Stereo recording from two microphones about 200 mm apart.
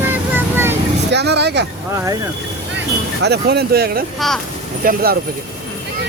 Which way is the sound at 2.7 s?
55° right (ahead or behind).